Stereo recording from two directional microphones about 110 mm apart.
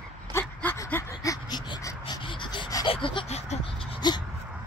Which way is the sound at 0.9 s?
25° left (ahead or behind).